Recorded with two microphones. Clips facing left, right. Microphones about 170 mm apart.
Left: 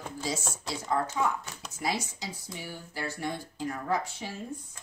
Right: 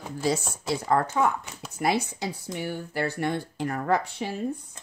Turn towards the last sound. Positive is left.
turn(degrees=-60)  # may be behind; listen again after turning